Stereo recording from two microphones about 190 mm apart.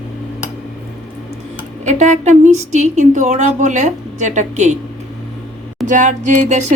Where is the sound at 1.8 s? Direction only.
40° right (ahead or behind).